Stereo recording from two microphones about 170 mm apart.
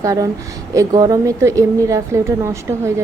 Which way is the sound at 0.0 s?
20° right (ahead or behind).